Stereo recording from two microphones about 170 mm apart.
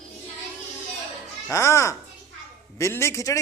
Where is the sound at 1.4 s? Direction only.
15° left (ahead or behind).